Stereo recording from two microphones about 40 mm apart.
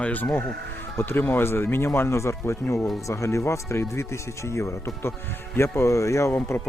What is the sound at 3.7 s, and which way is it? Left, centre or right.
Speech, left.